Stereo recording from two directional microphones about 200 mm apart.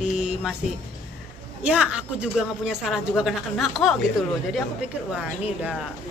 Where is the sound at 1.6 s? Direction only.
5° right (ahead or behind).